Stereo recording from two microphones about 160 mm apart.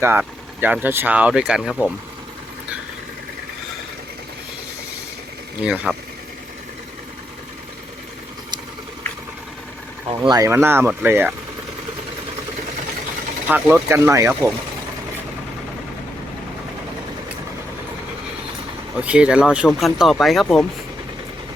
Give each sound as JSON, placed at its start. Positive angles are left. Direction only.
{"t": 0.0, "sound": "speech", "side_deg": -15}
{"t": 5.6, "sound": "speech", "side_deg": -5}
{"t": 10.2, "sound": "speech", "side_deg": -25}
{"t": 13.5, "sound": "speech", "side_deg": -5}
{"t": 13.8, "sound": "speech", "side_deg": -20}
{"t": 18.9, "sound": "speech", "side_deg": -5}